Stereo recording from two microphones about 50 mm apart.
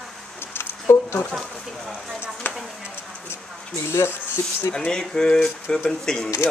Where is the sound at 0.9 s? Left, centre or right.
Left.